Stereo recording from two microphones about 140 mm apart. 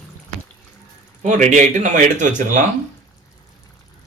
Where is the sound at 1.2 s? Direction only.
60° right (ahead or behind).